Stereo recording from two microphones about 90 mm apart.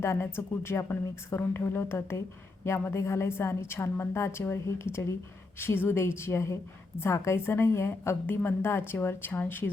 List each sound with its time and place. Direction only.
0.0 s a woman's voice: 25° left (ahead or behind)